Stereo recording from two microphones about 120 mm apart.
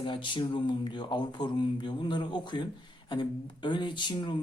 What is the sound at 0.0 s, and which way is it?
Speech, 40° left (ahead or behind).